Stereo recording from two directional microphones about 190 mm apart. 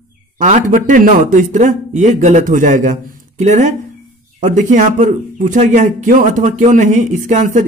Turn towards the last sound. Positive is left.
turn(degrees=-40)  # may be behind; listen again after turning